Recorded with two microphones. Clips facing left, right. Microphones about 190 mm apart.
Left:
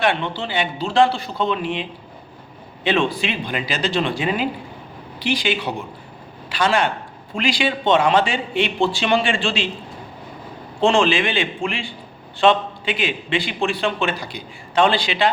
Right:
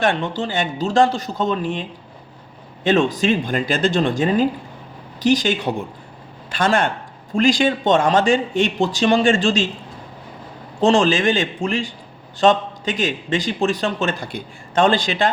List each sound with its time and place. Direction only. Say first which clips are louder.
0.0 s a man's voice: right 1 dB; 45° right (ahead or behind)
10.8 s a man's voice: right 1 dB; 40° right (ahead or behind)